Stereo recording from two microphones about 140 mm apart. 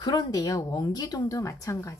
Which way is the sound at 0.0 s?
30° left (ahead or behind).